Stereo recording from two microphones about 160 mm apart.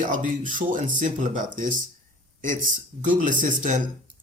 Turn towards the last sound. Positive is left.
turn(degrees=-55)  # may be behind; listen again after turning